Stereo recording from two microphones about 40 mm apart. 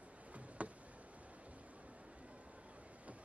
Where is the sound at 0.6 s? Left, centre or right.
Right.